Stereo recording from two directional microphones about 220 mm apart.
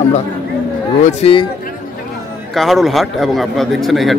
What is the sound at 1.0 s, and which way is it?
Speech, 25° left (ahead or behind).